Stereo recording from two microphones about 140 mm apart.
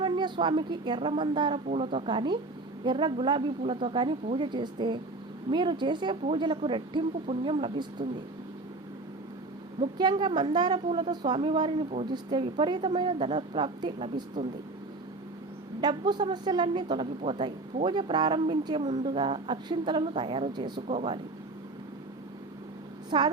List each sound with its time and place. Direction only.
0.0 s speech: 35° right (ahead or behind)
10.0 s speech: 35° right (ahead or behind)
10.8 s speech: 45° right (ahead or behind)
11.1 s speech: 30° right (ahead or behind)
15.8 s speech: 30° right (ahead or behind)
20.8 s speech: 45° right (ahead or behind)
23.0 s speech: 30° right (ahead or behind)